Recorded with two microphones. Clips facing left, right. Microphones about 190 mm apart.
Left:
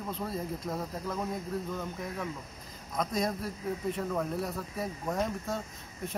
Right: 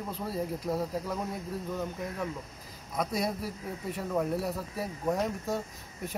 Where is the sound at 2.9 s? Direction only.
5° right (ahead or behind).